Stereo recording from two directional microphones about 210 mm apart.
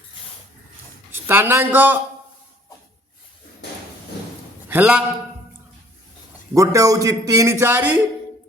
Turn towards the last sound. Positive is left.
turn(degrees=-10)  # may be behind; listen again after turning